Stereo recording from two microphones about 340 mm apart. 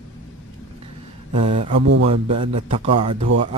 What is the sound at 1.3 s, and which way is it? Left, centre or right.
Speech, centre.